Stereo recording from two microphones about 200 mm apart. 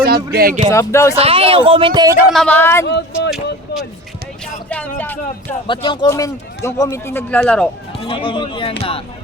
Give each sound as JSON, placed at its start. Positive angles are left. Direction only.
{"t": 0.3, "sound": "speech", "side_deg": -45}
{"t": 0.7, "sound": "speech", "side_deg": 15}
{"t": 1.1, "sound": "speech", "side_deg": -30}
{"t": 2.1, "sound": "speech", "side_deg": 0}
{"t": 3.2, "sound": "a sound", "side_deg": 0}
{"t": 4.7, "sound": "music", "side_deg": 10}
{"t": 5.6, "sound": "speech", "side_deg": 25}
{"t": 8.0, "sound": "speech", "side_deg": 25}